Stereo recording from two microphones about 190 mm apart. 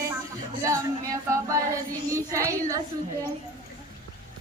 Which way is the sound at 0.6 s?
15° right (ahead or behind).